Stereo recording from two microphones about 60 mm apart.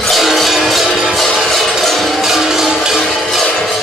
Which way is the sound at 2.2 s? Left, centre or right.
Centre.